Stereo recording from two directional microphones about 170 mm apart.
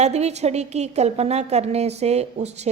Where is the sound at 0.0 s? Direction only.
40° right (ahead or behind).